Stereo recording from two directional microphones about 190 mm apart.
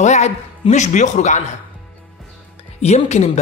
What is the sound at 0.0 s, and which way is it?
Speech, 40° left (ahead or behind).